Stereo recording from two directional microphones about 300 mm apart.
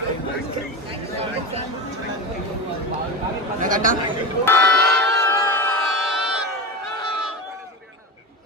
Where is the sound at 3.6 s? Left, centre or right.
Right.